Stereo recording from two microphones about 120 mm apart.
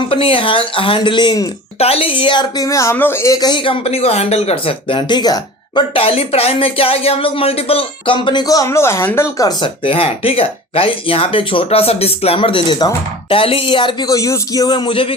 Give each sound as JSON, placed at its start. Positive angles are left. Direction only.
{"t": 0.0, "sound": "speech", "side_deg": 50}
{"t": 1.8, "sound": "speech", "side_deg": 55}
{"t": 2.6, "sound": "speech", "side_deg": 25}
{"t": 3.3, "sound": "speech", "side_deg": 35}
{"t": 9.5, "sound": "speech", "side_deg": 40}